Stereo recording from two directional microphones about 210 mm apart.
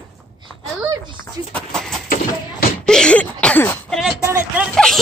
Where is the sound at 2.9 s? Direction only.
5° left (ahead or behind).